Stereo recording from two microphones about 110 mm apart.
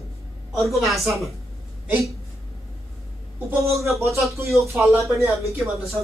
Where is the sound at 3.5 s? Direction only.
25° right (ahead or behind).